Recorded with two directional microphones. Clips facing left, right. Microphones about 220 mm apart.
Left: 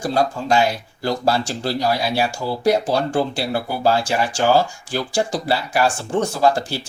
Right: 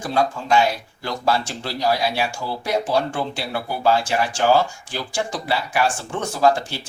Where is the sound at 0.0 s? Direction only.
35° left (ahead or behind).